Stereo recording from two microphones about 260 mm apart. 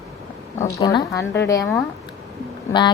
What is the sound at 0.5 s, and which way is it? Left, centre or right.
A woman's voice, centre.